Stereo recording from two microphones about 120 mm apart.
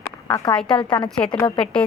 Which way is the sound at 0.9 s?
40° left (ahead or behind).